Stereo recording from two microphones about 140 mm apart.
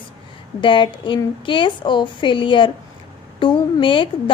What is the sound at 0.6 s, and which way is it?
A woman's voice, 35° left (ahead or behind).